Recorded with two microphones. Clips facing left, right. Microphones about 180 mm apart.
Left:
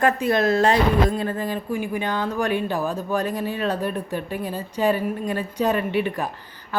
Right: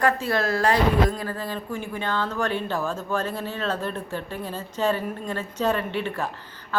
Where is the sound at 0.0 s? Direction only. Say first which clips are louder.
Left 3 dB; 20° left (ahead or behind).